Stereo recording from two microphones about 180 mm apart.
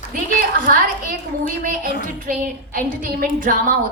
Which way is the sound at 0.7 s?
50° right (ahead or behind).